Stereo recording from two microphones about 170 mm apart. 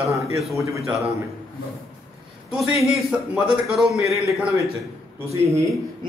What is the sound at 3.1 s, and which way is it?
Speech, 5° right (ahead or behind).